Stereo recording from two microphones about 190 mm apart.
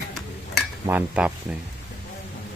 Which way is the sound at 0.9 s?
10° right (ahead or behind).